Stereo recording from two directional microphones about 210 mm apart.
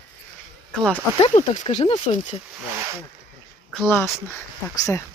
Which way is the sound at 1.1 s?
30° left (ahead or behind).